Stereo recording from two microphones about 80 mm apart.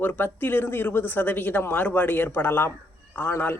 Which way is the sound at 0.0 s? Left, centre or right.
Left.